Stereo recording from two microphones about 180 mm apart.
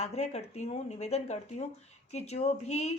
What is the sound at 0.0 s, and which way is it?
A woman's voice, 35° left (ahead or behind).